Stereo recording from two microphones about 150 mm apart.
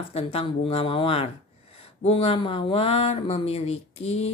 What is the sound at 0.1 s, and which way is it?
Speech, 40° left (ahead or behind).